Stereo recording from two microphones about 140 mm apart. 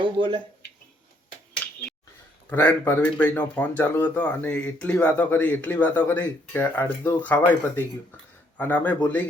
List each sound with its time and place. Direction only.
0.0 s speech: 35° right (ahead or behind)
2.5 s speech: 10° left (ahead or behind)
8.5 s speech: 10° left (ahead or behind)